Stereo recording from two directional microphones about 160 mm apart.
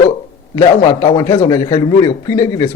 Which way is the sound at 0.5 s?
25° left (ahead or behind).